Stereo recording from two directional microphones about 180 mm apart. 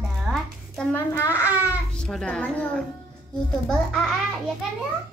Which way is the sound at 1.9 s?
5° left (ahead or behind).